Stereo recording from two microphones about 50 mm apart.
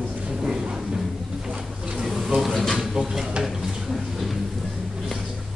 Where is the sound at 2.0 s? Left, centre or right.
Centre.